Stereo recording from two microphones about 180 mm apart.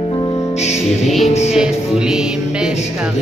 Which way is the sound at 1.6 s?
5° right (ahead or behind).